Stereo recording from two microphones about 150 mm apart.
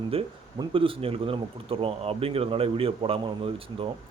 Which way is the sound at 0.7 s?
35° right (ahead or behind).